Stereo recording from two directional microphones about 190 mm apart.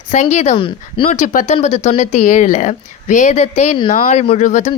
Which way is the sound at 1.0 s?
40° left (ahead or behind).